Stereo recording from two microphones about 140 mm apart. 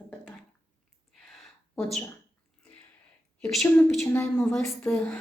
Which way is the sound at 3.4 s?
5° left (ahead or behind).